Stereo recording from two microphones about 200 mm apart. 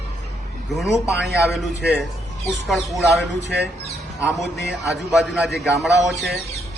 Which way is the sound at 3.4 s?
55° right (ahead or behind).